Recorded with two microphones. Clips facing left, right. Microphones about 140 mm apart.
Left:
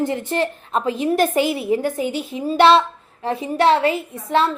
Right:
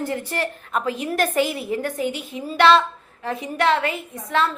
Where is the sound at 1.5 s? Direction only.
25° left (ahead or behind).